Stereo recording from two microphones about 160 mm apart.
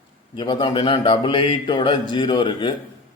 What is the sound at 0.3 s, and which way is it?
A man's voice, 30° left (ahead or behind).